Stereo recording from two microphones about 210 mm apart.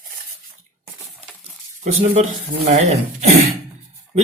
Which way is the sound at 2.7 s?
35° right (ahead or behind).